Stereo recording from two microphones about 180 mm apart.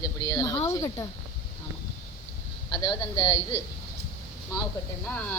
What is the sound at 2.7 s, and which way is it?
Speech, 30° left (ahead or behind).